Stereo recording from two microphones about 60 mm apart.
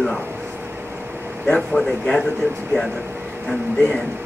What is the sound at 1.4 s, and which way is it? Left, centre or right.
Speech, centre.